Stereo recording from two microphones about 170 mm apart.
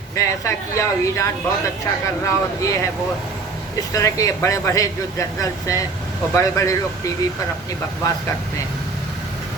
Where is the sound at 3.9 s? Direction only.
20° left (ahead or behind).